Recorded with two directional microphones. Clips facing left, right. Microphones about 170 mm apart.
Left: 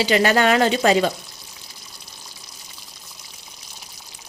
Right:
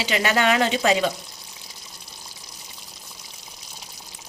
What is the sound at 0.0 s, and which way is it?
A woman's voice, 40° left (ahead or behind).